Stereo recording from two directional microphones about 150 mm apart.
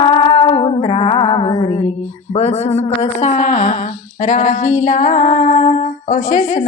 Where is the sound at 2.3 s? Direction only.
45° left (ahead or behind).